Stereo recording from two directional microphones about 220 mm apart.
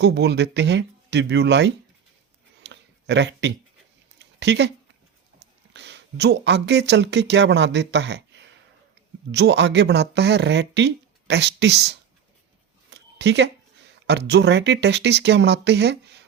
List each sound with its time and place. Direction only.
0.0 s speech: 50° right (ahead or behind)
2.6 s a sound: 50° right (ahead or behind)
5.7 s speech: 50° right (ahead or behind)